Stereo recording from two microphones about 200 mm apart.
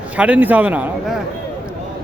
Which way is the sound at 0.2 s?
10° right (ahead or behind).